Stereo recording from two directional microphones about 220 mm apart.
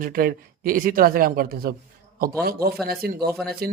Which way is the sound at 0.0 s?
40° right (ahead or behind).